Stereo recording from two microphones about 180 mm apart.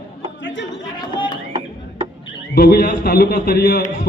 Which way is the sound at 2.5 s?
55° left (ahead or behind).